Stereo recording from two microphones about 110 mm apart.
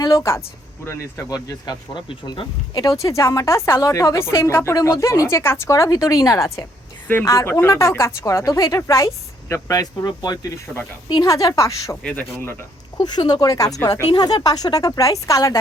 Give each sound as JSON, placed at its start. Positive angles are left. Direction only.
{"t": 0.0, "sound": "speech", "side_deg": 25}
{"t": 13.0, "sound": "speech", "side_deg": 40}